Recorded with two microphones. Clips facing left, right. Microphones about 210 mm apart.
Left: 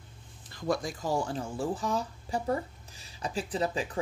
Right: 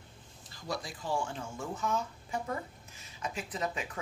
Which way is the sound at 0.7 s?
45° left (ahead or behind).